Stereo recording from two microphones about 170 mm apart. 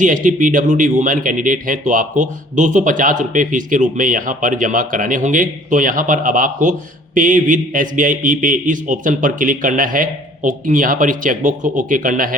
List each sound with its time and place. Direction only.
0.0 s speech: 50° right (ahead or behind)